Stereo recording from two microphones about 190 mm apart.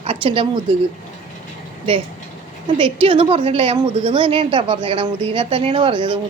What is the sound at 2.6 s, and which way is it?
A woman's voice, 25° right (ahead or behind).